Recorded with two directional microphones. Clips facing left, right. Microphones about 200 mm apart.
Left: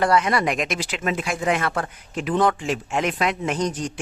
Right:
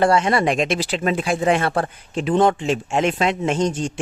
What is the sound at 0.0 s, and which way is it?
Speech, 30° right (ahead or behind).